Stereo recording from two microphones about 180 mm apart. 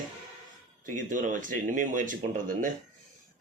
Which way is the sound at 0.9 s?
45° right (ahead or behind).